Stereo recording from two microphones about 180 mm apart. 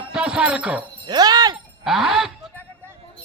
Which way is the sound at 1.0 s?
20° right (ahead or behind).